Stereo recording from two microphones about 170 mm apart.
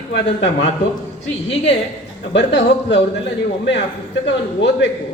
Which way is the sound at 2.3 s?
90° left.